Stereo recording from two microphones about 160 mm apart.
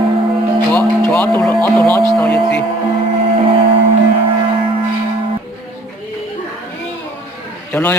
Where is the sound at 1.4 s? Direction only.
10° left (ahead or behind).